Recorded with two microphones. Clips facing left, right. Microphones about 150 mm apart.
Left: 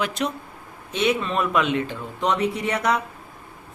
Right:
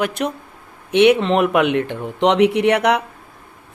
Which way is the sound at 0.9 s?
70° right (ahead or behind).